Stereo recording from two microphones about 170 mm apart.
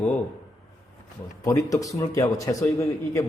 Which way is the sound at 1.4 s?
20° left (ahead or behind).